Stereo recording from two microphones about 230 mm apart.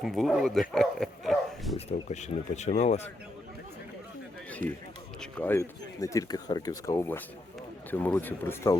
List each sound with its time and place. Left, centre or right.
0.0 s speech: centre
1.9 s speech: left
4.6 s speech: right
5.2 s speech: centre